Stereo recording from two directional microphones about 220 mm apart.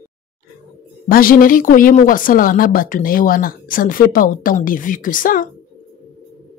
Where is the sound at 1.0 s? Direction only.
40° left (ahead or behind).